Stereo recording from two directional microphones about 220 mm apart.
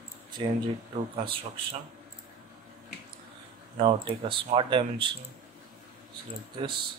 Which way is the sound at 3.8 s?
25° right (ahead or behind).